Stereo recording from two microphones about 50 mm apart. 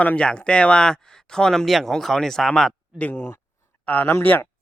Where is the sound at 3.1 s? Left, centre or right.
Left.